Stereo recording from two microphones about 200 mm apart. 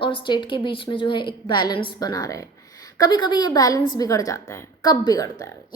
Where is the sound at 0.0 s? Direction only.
25° left (ahead or behind).